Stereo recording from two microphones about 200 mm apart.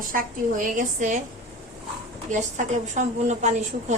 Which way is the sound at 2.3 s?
40° right (ahead or behind).